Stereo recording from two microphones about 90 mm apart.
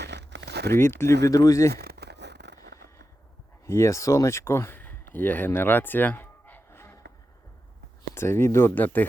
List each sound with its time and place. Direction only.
0.8 s speech: 30° left (ahead or behind)
2.7 s fireworks: 35° left (ahead or behind)
3.7 s speech: 30° left (ahead or behind)
8.1 s speech: 30° left (ahead or behind)